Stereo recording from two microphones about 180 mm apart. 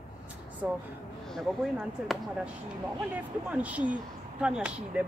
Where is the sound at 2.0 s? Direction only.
Centre (ahead or behind).